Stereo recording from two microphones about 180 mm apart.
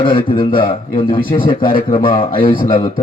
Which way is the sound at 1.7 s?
30° left (ahead or behind).